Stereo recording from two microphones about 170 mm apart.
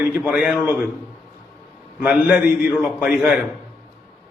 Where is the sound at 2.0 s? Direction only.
5° right (ahead or behind).